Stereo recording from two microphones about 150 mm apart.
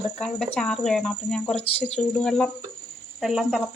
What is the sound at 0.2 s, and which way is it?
Speech, 5° left (ahead or behind).